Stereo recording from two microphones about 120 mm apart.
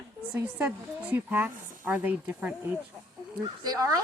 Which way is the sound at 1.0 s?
15° right (ahead or behind).